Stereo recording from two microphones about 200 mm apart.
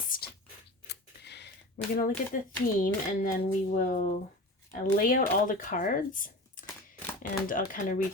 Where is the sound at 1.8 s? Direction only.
50° left (ahead or behind).